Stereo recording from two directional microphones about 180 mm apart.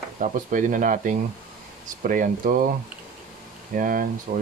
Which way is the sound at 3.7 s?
50° right (ahead or behind).